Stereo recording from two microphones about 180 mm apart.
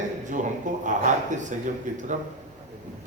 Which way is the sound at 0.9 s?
45° right (ahead or behind).